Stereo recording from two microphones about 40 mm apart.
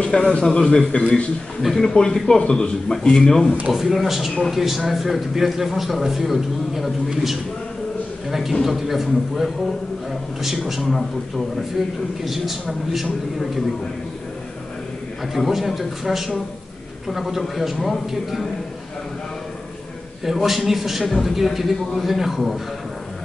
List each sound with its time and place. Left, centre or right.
0.0 s speech: left
1.6 s a man's voice: centre
1.9 s speech: centre
3.7 s a man's voice: centre
8.3 s a man's voice: centre
12.9 s a man's voice: centre
15.3 s a man's voice: centre
20.2 s a man's voice: centre